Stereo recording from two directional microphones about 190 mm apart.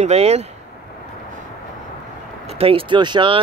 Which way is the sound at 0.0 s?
35° right (ahead or behind).